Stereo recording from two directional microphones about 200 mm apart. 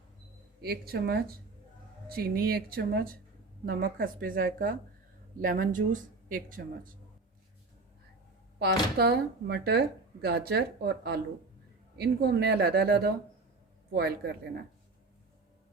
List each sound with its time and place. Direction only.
0.6 s speech: 50° right (ahead or behind)
8.5 s speech: 50° right (ahead or behind)